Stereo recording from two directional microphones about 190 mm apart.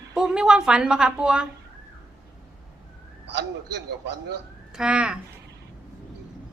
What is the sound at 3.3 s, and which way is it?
Speech, 65° right (ahead or behind).